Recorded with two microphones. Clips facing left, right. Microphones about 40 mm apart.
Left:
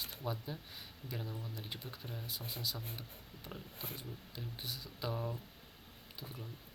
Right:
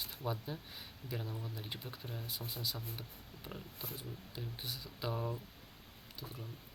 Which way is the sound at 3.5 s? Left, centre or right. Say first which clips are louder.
Right 1 dB; centre.